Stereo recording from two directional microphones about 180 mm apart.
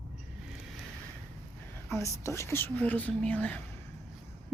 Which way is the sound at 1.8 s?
15° left (ahead or behind).